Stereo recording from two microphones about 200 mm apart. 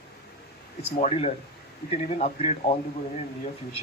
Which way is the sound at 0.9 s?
35° left (ahead or behind).